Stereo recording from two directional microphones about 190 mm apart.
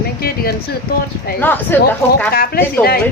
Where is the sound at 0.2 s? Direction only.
55° left (ahead or behind).